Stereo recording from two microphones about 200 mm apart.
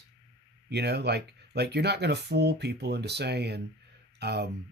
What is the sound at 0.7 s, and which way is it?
Speech, 55° right (ahead or behind).